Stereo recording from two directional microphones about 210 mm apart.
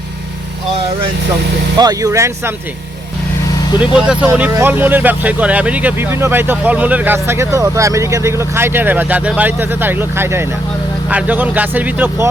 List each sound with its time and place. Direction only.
1.7 s speech: 20° right (ahead or behind)
3.8 s speech: 5° right (ahead or behind)